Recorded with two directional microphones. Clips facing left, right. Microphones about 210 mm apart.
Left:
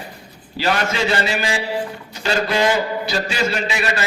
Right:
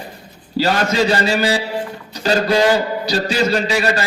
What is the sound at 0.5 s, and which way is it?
A man's voice, 35° right (ahead or behind).